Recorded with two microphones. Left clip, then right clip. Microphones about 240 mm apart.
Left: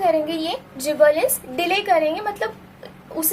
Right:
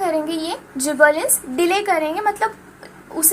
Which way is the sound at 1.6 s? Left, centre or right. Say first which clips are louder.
Even; right.